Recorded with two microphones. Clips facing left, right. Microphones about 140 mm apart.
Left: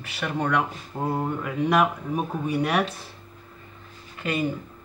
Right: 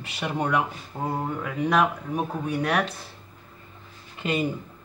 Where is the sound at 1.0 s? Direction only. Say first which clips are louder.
Left 2 dB; centre (ahead or behind).